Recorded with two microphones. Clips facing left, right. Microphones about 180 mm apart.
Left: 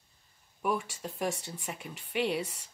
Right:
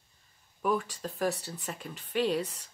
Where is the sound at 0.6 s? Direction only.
10° left (ahead or behind).